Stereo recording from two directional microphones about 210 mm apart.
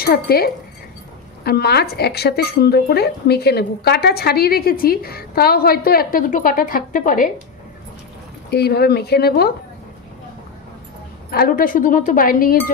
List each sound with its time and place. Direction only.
0.0 s speech: 45° left (ahead or behind)
8.5 s speech: 50° left (ahead or behind)
11.2 s speech: 45° left (ahead or behind)